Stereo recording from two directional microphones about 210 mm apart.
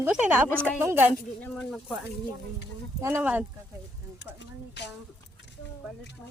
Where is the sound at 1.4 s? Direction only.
5° left (ahead or behind).